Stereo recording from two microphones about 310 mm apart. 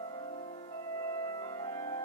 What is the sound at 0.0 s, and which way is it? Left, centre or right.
Music, centre.